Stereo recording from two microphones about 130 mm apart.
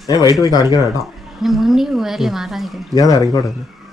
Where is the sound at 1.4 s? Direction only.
Centre (ahead or behind).